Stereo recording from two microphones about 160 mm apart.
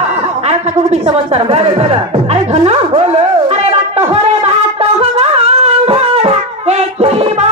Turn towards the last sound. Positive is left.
turn(degrees=-40)  # may be behind; listen again after turning